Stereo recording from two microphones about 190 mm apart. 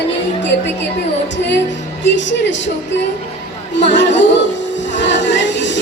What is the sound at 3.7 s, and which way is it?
Music, 65° left (ahead or behind).